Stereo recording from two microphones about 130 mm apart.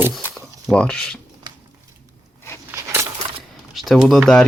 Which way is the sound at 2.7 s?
20° right (ahead or behind).